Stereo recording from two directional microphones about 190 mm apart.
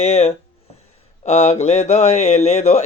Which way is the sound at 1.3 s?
35° left (ahead or behind).